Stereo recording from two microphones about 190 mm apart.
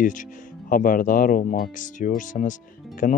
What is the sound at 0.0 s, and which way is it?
Speech, 45° left (ahead or behind).